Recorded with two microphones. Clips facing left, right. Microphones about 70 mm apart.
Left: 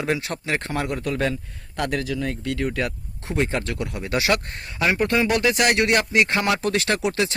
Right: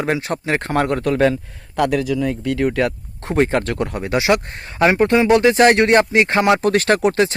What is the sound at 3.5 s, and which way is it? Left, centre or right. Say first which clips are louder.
Speech: right 7 dB; right.